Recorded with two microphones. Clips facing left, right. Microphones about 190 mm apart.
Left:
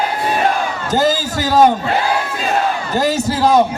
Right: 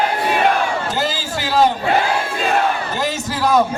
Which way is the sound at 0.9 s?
40° left (ahead or behind).